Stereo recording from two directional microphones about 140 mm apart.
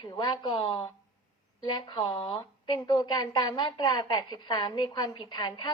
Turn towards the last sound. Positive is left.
turn(degrees=30)  # may be behind; listen again after turning